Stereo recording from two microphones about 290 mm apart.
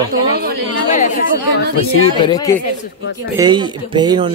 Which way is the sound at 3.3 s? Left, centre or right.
Centre.